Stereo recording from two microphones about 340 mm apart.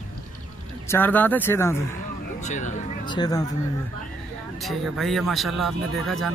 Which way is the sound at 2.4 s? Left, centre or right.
Left.